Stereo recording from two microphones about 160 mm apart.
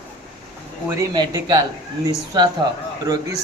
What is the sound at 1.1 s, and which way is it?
A man's voice, 25° right (ahead or behind).